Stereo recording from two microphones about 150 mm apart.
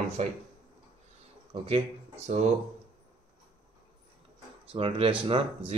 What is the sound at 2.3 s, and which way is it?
Speech, 60° right (ahead or behind).